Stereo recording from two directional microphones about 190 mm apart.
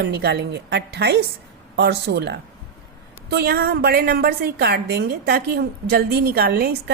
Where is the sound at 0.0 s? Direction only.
60° right (ahead or behind).